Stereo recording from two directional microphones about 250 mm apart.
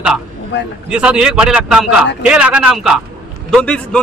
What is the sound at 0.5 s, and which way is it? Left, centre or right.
Speech, left.